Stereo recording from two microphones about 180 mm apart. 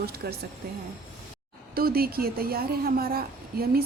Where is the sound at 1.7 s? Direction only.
55° right (ahead or behind).